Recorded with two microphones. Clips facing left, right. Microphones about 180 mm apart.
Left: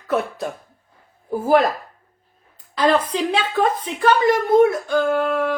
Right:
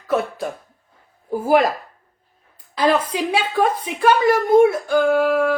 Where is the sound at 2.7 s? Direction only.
10° right (ahead or behind).